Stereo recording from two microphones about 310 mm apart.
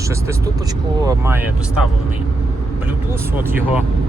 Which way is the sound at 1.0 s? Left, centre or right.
Centre.